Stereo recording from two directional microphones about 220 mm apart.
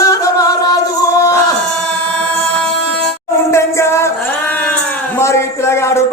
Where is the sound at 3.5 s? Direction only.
10° left (ahead or behind).